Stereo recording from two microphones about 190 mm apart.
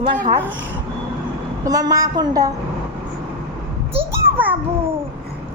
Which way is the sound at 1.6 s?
20° right (ahead or behind).